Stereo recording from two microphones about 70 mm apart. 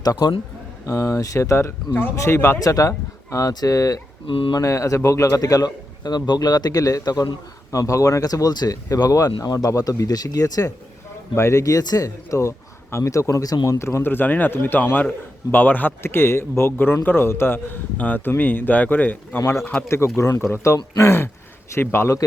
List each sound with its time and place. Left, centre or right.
0.0 s speech: left
0.9 s a man's voice: left
2.6 s speech: left
3.5 s speech: left
7.7 s speech: left
11.3 s speech: left
13.7 s a man's voice: left
16.0 s a man's voice: left
20.1 s a man's voice: left